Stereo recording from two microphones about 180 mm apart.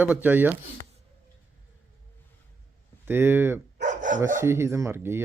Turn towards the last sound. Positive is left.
turn(degrees=-15)  # may be behind; listen again after turning